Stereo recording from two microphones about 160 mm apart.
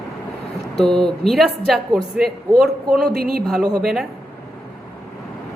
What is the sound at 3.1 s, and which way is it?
Speech, 70° right (ahead or behind).